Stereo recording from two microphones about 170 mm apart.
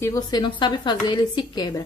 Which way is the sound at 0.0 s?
20° left (ahead or behind).